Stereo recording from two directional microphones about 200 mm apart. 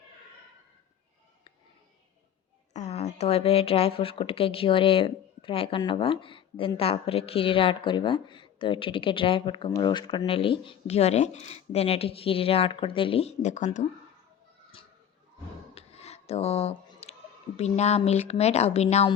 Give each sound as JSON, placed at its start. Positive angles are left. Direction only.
{"t": 2.7, "sound": "speech", "side_deg": 35}
{"t": 15.7, "sound": "a sound", "side_deg": 30}
{"t": 17.6, "sound": "a woman's voice", "side_deg": 35}